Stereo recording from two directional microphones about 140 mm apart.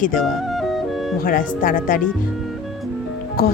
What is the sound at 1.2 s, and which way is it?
Speech, 85° left.